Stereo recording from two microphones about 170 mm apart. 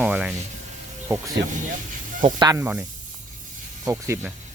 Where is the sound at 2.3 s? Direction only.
25° right (ahead or behind).